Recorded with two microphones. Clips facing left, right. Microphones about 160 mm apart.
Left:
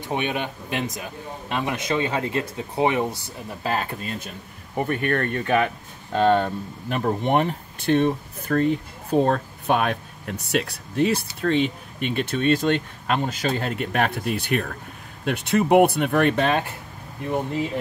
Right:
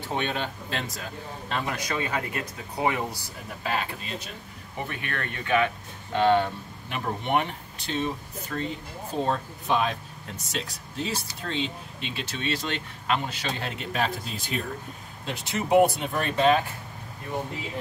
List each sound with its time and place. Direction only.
0.1 s speech: 15° left (ahead or behind)
3.6 s speech: 45° left (ahead or behind)
6.9 s speech: 40° left (ahead or behind)
7.8 s speech: 60° left (ahead or behind)